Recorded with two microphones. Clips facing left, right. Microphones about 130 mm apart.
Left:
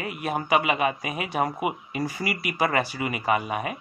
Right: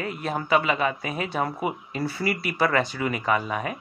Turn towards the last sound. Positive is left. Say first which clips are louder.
# even
turn(degrees=10)  # may be behind; listen again after turning